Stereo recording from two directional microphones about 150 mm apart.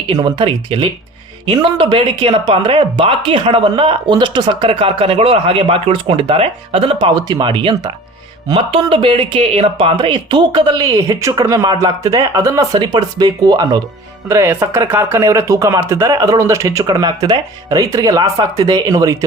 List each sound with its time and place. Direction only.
0.1 s speech: 25° right (ahead or behind)
7.1 s speech: 25° right (ahead or behind)
14.3 s speech: 15° right (ahead or behind)